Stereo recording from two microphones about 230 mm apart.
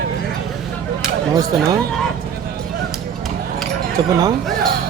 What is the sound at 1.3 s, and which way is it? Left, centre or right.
Speech, centre.